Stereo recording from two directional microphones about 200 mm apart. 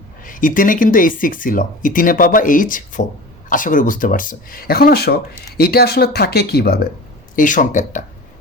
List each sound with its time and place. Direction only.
0.3 s speech: 40° left (ahead or behind)
7.3 s speech: 40° left (ahead or behind)